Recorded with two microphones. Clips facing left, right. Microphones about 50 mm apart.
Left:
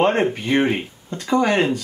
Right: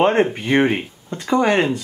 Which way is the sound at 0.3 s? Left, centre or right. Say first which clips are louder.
Right 2 dB; right.